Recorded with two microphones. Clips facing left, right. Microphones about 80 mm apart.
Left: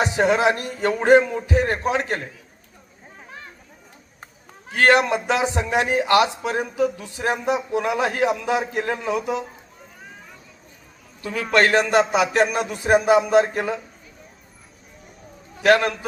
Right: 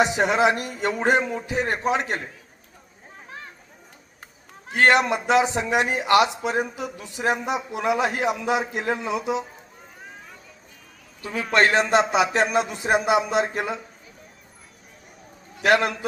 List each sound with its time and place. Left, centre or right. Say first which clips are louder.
0.0 s music: left 1 dB; centre
1.5 s speech: left 2 dB; right
3.2 s a sound: right 1 dB; centre
4.7 s speech: left 2 dB; right
9.0 s music: left 2 dB; centre
11.2 s a man's voice: left 1 dB; right
15.6 s music: left 3 dB; centre